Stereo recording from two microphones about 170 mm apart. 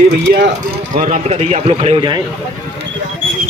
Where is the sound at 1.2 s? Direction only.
40° right (ahead or behind).